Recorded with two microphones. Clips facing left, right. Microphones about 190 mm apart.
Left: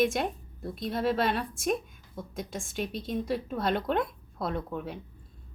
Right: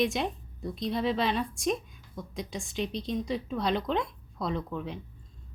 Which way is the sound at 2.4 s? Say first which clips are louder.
Even; 50° left (ahead or behind).